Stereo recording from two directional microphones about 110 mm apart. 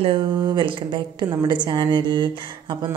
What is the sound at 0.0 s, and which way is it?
Mantra, 50° right (ahead or behind).